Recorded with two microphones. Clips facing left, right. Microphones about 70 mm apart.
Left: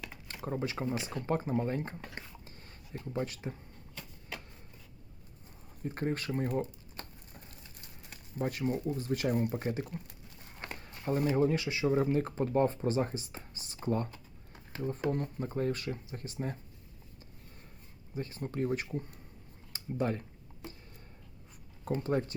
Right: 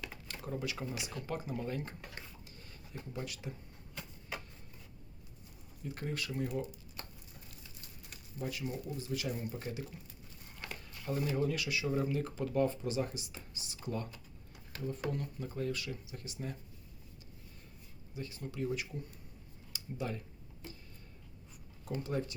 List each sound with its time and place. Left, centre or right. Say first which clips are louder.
0.4 s speech: left 5 dB; left
5.8 s a sound: left 6 dB; left
8.1 s speech: left 6 dB; left
18.1 s speech: left 6 dB; left
21.8 s speech: left 5 dB; left